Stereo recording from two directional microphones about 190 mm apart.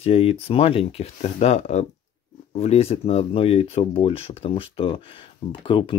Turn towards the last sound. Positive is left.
turn(degrees=25)  # may be behind; listen again after turning